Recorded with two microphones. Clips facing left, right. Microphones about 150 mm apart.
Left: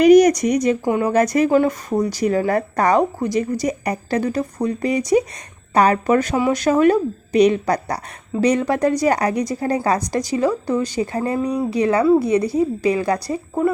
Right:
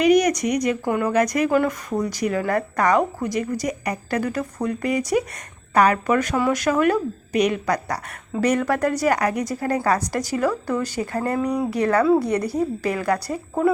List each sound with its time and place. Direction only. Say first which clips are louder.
0.0 s a woman's voice: left 6 dB; 40° left (ahead or behind); by 13.2 s 15° left (ahead or behind)